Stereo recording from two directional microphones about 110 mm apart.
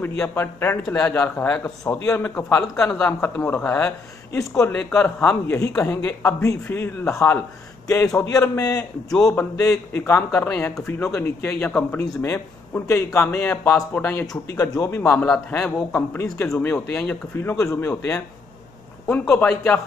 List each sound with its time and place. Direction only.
0.0 s speech: 20° left (ahead or behind)
4.7 s a man's voice: 15° left (ahead or behind)
14.5 s speech: 30° left (ahead or behind); by 19.8 s 15° left (ahead or behind)